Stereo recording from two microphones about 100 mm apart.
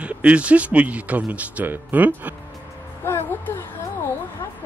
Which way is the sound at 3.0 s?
25° left (ahead or behind).